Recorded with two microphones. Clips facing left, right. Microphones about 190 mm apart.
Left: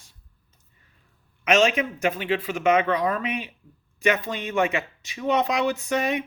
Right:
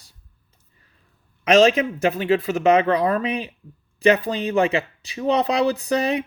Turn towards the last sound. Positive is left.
turn(degrees=-35)  # may be behind; listen again after turning